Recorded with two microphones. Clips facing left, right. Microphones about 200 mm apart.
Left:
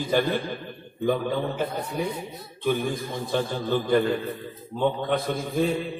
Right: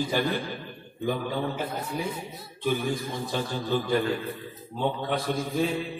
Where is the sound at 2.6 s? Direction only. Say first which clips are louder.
Left 2 dB; 50° left (ahead or behind).